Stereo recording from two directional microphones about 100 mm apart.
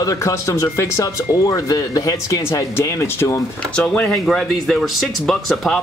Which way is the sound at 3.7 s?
10° left (ahead or behind).